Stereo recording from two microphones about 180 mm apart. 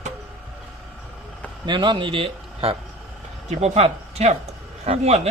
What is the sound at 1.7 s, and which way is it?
Speech, 25° right (ahead or behind).